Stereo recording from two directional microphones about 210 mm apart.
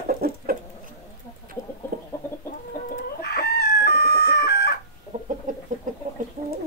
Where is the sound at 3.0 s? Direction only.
45° left (ahead or behind).